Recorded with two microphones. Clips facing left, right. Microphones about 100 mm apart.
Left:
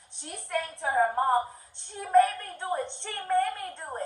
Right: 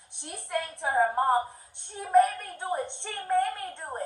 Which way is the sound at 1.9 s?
15° right (ahead or behind).